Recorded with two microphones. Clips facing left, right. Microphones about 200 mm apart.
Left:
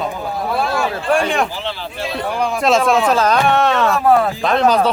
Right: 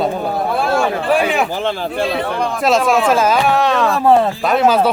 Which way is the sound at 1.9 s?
60° right (ahead or behind).